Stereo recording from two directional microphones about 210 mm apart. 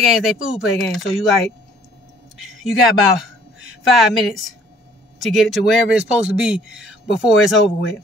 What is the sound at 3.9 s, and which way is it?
A woman's voice, centre (ahead or behind).